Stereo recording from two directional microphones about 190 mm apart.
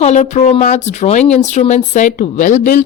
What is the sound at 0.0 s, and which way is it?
Speech, 35° left (ahead or behind).